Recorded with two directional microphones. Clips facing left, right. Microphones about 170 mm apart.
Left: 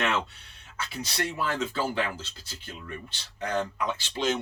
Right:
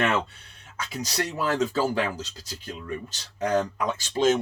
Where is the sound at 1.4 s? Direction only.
40° right (ahead or behind).